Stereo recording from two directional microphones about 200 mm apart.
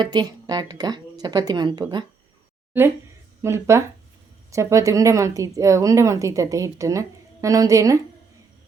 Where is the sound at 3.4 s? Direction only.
15° right (ahead or behind).